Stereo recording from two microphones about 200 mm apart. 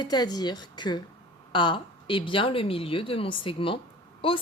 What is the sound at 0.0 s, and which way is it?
A woman's voice, 20° left (ahead or behind).